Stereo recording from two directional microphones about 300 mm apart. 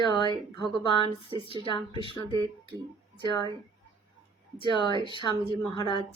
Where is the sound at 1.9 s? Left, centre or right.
Centre.